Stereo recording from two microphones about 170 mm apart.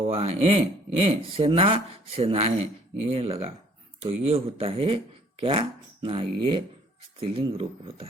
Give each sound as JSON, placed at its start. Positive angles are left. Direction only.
{"t": 0.0, "sound": "speech", "side_deg": -35}